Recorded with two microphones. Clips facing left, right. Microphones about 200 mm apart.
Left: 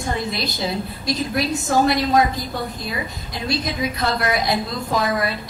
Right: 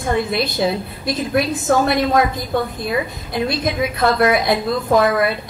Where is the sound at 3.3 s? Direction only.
55° right (ahead or behind).